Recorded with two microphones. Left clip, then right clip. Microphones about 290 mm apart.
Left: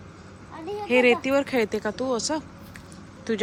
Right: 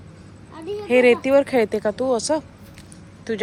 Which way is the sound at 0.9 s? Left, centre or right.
Centre.